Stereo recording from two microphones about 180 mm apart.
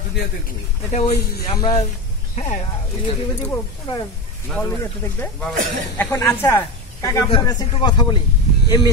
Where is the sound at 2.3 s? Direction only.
45° left (ahead or behind).